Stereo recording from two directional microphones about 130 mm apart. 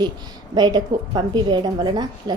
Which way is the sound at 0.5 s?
35° right (ahead or behind).